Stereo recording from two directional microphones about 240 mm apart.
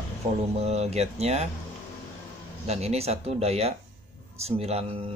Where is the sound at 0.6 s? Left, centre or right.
Right.